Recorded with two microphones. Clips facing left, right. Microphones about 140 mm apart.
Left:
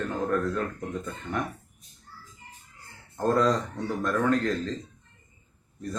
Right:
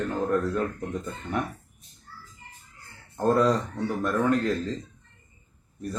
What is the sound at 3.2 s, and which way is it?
Speech, 10° right (ahead or behind).